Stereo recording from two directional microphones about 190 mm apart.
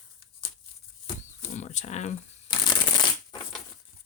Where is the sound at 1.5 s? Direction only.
35° left (ahead or behind).